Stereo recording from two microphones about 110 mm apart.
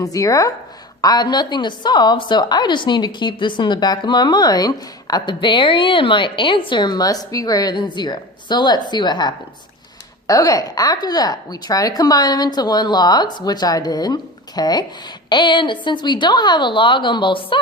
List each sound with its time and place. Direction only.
0.0 s a woman's voice: 30° left (ahead or behind); by 17.6 s 45° left (ahead or behind)